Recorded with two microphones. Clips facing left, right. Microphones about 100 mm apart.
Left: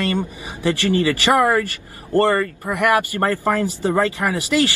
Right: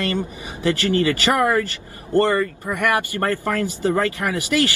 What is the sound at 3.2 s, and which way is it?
A man's voice, 20° left (ahead or behind).